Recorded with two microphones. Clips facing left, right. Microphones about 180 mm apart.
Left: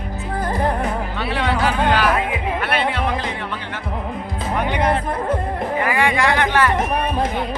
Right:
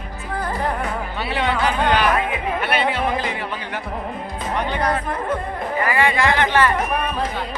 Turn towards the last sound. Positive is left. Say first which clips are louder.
# even
turn(degrees=10)  # may be behind; listen again after turning